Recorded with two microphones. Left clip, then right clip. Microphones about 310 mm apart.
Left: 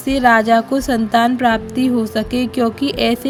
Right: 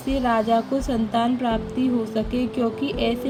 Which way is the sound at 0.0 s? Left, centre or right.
Centre.